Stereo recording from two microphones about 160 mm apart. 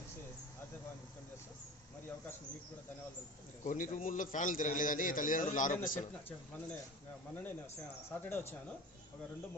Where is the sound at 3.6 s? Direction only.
55° left (ahead or behind).